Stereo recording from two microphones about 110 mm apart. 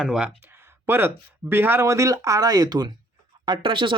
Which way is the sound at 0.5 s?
20° right (ahead or behind).